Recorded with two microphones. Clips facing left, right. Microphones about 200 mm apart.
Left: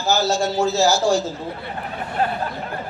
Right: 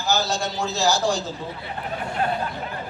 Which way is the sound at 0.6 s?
15° right (ahead or behind).